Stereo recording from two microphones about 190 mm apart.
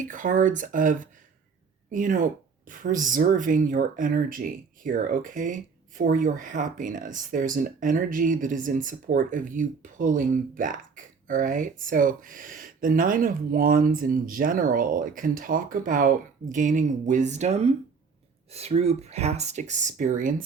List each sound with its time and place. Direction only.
0.0 s speech: 45° right (ahead or behind)